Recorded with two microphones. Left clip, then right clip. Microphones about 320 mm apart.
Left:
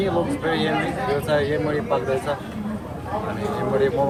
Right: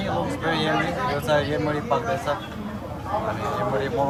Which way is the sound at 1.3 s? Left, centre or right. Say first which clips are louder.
Even; centre.